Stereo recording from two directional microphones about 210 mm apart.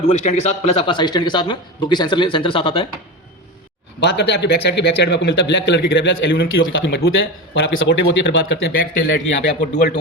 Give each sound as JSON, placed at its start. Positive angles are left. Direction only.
{"t": 0.1, "sound": "a man's voice", "side_deg": 35}
{"t": 4.0, "sound": "speech", "side_deg": 55}
{"t": 7.5, "sound": "speech", "side_deg": 60}
{"t": 8.7, "sound": "a man's voice", "side_deg": 45}